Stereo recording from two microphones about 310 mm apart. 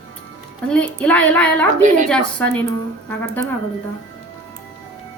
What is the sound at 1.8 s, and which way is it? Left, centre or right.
Speech, right.